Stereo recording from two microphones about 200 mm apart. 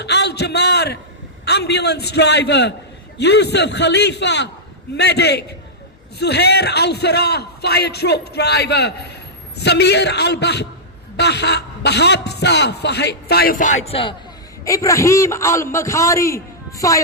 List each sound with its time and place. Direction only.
0.0 s a man's voice: 55° left (ahead or behind); by 14.2 s 25° left (ahead or behind)
14.6 s a man's voice: 15° left (ahead or behind)